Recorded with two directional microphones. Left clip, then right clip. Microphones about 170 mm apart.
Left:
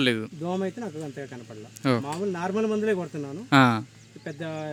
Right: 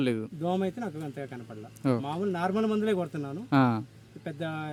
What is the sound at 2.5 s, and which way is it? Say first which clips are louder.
Speech: left 3 dB; 35° right (ahead or behind).